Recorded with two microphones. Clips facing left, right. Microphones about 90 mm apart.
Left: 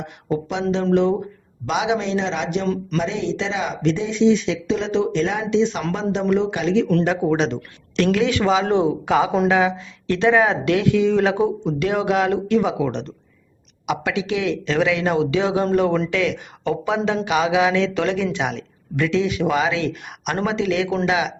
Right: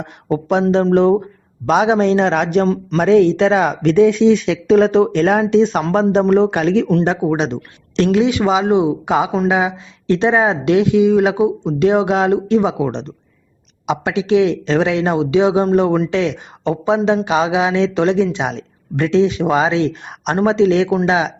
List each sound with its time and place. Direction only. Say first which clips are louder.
0.3 s speech: right 7 dB; 45° right (ahead or behind)
6.8 s speech: right 3 dB; 25° right (ahead or behind)